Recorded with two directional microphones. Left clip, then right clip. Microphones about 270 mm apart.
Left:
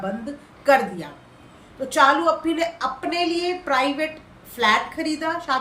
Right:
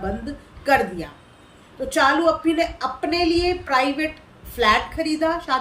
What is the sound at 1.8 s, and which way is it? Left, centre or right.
A woman's voice, centre.